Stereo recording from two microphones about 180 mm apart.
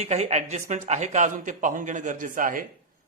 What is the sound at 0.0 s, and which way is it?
A woman's voice, 40° right (ahead or behind).